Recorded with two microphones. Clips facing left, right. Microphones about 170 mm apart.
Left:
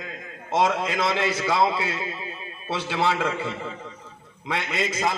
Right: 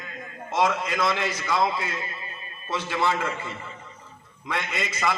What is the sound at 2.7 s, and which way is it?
A man's voice, 70° left (ahead or behind).